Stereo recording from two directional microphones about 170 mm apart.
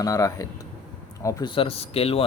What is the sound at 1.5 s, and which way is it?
Speech, 35° left (ahead or behind).